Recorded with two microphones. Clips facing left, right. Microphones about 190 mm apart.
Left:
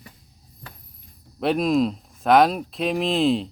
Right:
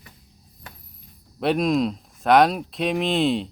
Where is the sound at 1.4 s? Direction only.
Centre (ahead or behind).